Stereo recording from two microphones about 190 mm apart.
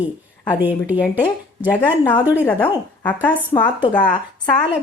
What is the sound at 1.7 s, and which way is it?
A woman's voice, 10° left (ahead or behind).